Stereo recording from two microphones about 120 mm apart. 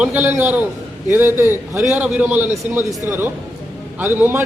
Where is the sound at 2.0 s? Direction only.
10° right (ahead or behind).